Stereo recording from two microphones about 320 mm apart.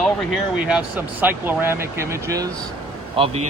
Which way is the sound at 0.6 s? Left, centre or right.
Centre.